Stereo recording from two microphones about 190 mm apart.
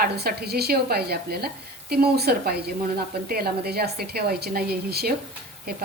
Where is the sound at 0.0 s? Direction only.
55° right (ahead or behind).